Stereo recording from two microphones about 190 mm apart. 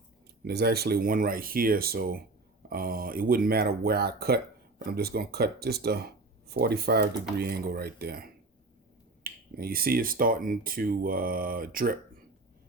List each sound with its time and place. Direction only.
0.4 s speech: 55° right (ahead or behind)